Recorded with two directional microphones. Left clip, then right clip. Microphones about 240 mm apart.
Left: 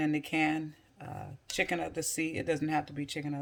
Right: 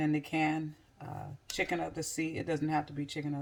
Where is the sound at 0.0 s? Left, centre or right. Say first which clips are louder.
Left 1 dB; left.